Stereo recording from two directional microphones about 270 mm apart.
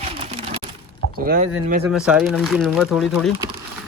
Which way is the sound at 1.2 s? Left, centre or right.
Right.